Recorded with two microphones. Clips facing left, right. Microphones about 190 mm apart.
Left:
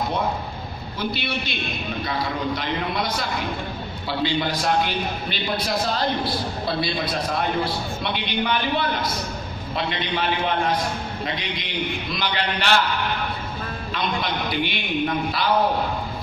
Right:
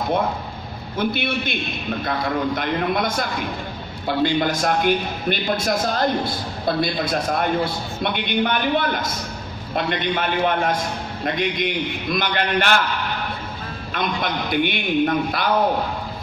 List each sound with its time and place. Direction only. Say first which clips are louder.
0.9 s a man's voice: right 5 dB; 50° right (ahead or behind)
13.9 s a man's voice: right 2 dB; 50° right (ahead or behind)